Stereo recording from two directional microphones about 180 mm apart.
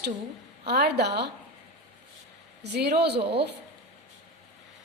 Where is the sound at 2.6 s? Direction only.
65° right (ahead or behind).